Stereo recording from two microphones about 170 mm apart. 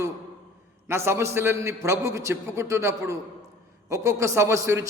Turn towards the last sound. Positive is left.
turn(degrees=-15)  # may be behind; listen again after turning